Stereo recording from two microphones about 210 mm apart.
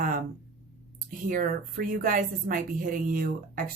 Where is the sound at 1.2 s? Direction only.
40° right (ahead or behind).